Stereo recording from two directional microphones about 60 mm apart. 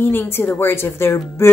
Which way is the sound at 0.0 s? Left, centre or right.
Left.